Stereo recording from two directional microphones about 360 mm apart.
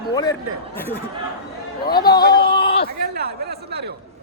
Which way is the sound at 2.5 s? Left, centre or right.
Centre.